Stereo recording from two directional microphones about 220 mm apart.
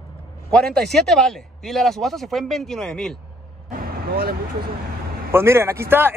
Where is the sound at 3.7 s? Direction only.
40° right (ahead or behind).